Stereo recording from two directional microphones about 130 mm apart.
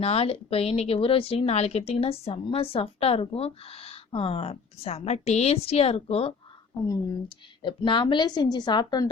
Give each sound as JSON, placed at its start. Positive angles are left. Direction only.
{"t": 0.0, "sound": "a woman's voice", "side_deg": 50}
{"t": 6.8, "sound": "a woman's voice", "side_deg": 35}